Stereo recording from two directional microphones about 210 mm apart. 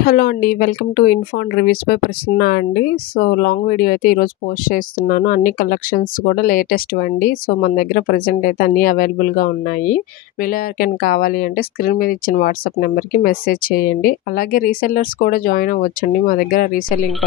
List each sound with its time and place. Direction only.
0.0 s speech: 45° left (ahead or behind)